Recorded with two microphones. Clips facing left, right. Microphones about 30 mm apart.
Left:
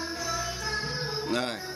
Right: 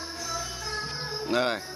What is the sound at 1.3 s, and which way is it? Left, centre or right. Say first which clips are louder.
Speech: right 6 dB; centre.